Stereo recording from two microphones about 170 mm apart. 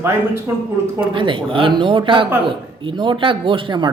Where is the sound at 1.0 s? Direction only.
30° right (ahead or behind).